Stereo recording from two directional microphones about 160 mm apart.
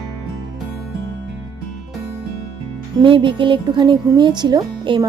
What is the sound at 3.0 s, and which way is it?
Speech, 30° right (ahead or behind).